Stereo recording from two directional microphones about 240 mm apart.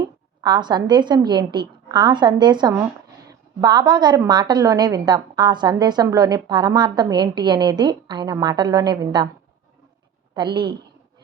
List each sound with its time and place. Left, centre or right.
0.0 s a woman's voice: centre
10.3 s a woman's voice: centre